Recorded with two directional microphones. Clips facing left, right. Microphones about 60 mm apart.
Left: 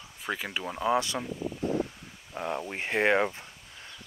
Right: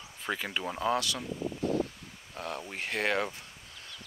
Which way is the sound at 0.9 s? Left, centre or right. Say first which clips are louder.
Left 5 dB; left.